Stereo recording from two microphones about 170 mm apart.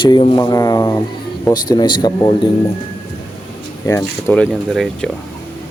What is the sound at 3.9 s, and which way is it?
Speech, 10° left (ahead or behind).